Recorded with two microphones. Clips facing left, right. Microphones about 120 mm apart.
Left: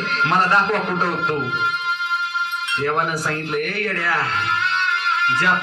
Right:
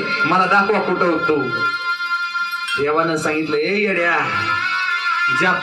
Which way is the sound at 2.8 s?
60° right (ahead or behind).